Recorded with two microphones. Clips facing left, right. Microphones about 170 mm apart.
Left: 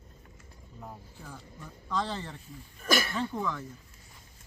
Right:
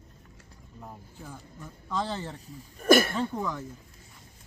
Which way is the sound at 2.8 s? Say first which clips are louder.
Right 9 dB; 50° right (ahead or behind).